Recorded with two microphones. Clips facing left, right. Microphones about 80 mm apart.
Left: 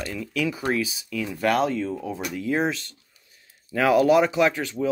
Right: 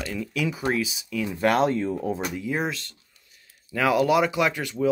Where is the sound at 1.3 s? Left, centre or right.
Right.